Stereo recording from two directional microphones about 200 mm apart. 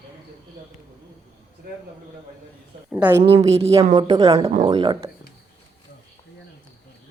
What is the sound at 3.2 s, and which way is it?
A woman's voice, 30° right (ahead or behind).